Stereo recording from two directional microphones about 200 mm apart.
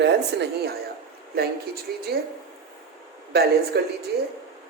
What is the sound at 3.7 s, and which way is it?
Speech, 55° right (ahead or behind).